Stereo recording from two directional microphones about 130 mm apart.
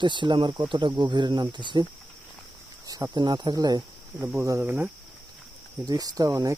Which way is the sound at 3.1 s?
35° right (ahead or behind).